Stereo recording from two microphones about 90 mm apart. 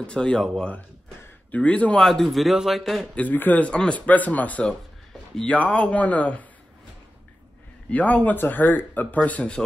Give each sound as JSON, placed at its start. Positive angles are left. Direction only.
{"t": 0.0, "sound": "speech", "side_deg": 10}
{"t": 2.0, "sound": "a man's voice", "side_deg": 0}
{"t": 3.2, "sound": "speech", "side_deg": 20}
{"t": 7.9, "sound": "speech", "side_deg": 15}